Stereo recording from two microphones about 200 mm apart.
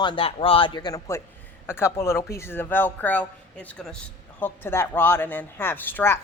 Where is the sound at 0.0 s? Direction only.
25° left (ahead or behind).